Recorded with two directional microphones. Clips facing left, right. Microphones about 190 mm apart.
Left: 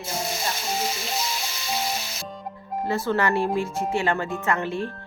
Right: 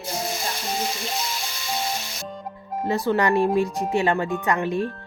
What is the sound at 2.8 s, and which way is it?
Speech, 15° right (ahead or behind).